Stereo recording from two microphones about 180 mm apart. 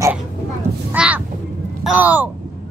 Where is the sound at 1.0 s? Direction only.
5° right (ahead or behind).